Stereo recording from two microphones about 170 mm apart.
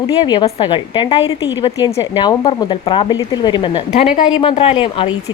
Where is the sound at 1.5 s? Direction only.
25° left (ahead or behind).